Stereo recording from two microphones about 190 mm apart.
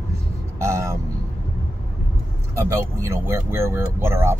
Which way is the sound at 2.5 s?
15° right (ahead or behind).